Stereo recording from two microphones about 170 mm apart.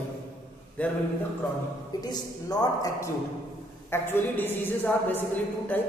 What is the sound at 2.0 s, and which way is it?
A man's voice, 25° left (ahead or behind).